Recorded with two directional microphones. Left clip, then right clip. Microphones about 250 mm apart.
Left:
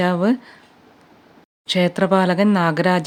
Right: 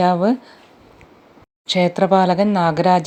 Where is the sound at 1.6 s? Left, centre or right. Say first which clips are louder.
Right 2 dB; centre.